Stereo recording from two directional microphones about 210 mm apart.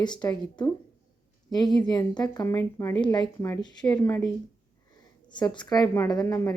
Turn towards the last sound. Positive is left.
turn(degrees=15)  # may be behind; listen again after turning